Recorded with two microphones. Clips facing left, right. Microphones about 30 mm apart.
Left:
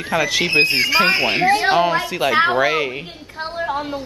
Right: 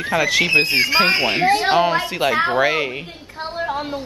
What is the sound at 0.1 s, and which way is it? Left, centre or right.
Speech, centre.